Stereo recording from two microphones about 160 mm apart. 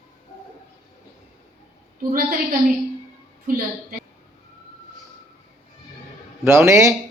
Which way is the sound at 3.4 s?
65° right (ahead or behind).